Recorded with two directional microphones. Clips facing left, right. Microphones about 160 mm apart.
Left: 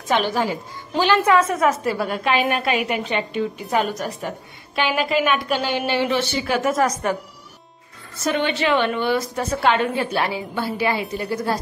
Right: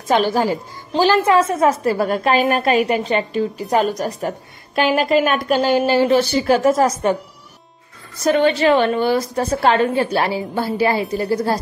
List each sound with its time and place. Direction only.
0.1 s a woman's voice: 40° right (ahead or behind)
8.2 s a woman's voice: 40° right (ahead or behind)